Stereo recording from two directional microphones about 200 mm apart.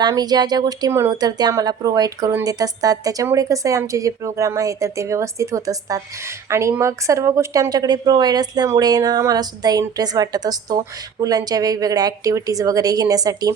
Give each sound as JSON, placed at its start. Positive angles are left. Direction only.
{"t": 0.0, "sound": "speech", "side_deg": -20}